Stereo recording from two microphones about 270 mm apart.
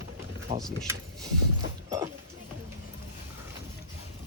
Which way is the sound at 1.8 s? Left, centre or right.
Centre.